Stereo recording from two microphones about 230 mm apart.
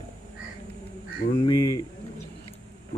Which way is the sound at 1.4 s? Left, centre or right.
Centre.